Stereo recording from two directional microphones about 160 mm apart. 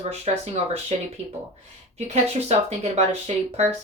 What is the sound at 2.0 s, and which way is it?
A woman's voice, 40° right (ahead or behind).